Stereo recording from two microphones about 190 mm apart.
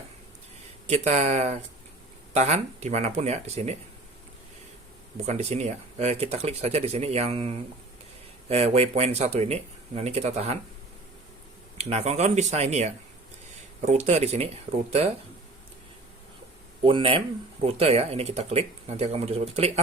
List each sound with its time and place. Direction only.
0.9 s speech: 35° right (ahead or behind)
5.2 s speech: 35° right (ahead or behind)
11.8 s speech: 35° right (ahead or behind)
16.8 s speech: 30° right (ahead or behind)